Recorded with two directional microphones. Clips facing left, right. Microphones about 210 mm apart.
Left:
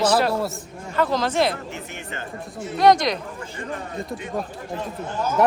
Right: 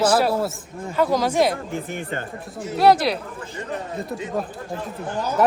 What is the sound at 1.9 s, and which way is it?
Speech, 50° right (ahead or behind).